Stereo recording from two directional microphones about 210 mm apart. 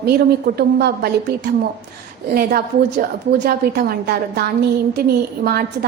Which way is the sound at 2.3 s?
45° right (ahead or behind).